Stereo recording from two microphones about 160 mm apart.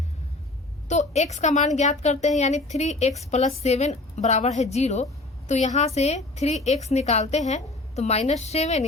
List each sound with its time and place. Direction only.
0.9 s a woman's voice: 45° left (ahead or behind)